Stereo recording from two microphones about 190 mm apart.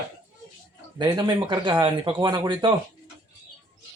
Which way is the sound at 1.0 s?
25° right (ahead or behind).